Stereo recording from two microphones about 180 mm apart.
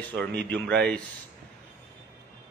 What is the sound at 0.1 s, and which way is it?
Speech, 5° left (ahead or behind).